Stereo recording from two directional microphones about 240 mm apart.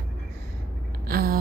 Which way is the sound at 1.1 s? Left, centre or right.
Right.